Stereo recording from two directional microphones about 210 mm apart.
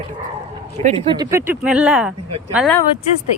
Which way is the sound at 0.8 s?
30° right (ahead or behind).